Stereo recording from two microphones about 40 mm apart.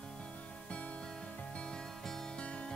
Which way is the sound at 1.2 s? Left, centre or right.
Left.